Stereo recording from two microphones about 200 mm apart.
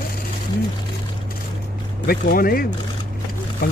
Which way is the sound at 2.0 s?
50° left (ahead or behind).